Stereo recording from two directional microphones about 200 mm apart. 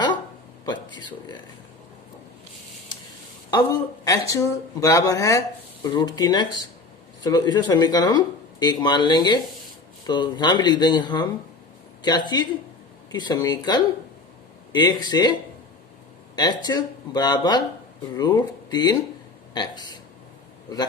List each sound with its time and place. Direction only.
0.6 s speech: 20° left (ahead or behind)
3.5 s speech: 20° left (ahead or behind)